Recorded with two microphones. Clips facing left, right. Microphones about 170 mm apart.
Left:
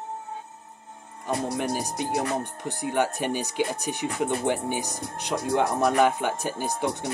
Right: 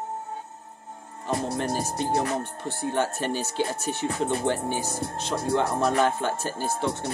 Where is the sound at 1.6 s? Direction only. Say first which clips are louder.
Right 1 dB; 15° left (ahead or behind).